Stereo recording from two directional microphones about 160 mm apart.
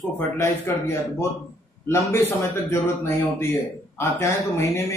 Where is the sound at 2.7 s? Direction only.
15° left (ahead or behind).